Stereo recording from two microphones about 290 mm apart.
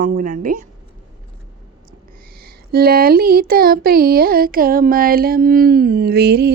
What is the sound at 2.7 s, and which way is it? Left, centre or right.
Speech, right.